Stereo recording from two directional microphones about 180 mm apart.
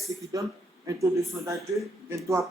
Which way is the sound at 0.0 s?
20° right (ahead or behind).